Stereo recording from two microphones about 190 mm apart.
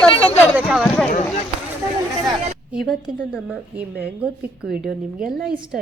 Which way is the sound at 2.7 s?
Centre (ahead or behind).